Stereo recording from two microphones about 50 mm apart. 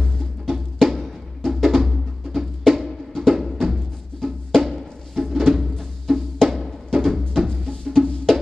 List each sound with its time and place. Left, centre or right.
0.5 s music: centre